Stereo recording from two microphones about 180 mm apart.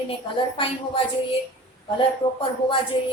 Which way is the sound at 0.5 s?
30° left (ahead or behind).